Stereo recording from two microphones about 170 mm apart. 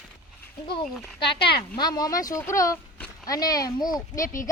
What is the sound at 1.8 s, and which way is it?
Speech, 25° left (ahead or behind).